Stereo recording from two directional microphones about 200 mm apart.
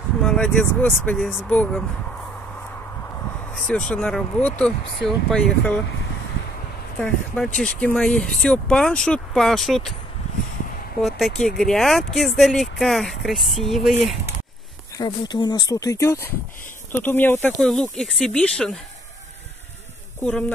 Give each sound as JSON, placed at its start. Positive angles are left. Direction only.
{"t": 0.2, "sound": "speech", "side_deg": 5}
{"t": 3.5, "sound": "speech", "side_deg": 5}
{"t": 7.0, "sound": "speech", "side_deg": 5}
{"t": 11.0, "sound": "speech", "side_deg": 0}
{"t": 15.0, "sound": "speech", "side_deg": 20}
{"t": 20.2, "sound": "speech", "side_deg": 5}